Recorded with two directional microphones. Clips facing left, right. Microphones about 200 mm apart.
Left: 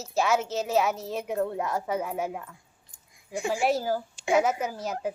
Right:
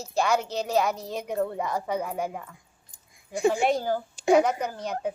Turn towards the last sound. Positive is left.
turn(degrees=5)  # may be behind; listen again after turning